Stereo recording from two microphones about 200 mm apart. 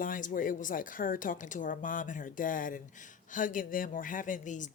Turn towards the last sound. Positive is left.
turn(degrees=40)  # may be behind; listen again after turning